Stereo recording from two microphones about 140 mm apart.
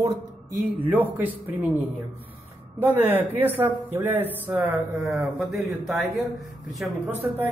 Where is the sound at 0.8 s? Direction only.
15° right (ahead or behind).